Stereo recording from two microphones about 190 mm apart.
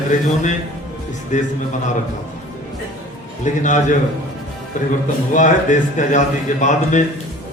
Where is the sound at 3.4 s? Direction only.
40° left (ahead or behind).